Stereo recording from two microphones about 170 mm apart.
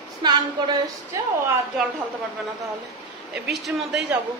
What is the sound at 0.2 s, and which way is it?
A woman's voice, 25° right (ahead or behind).